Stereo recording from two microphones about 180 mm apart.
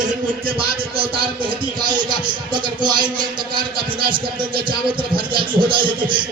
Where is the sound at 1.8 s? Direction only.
25° right (ahead or behind).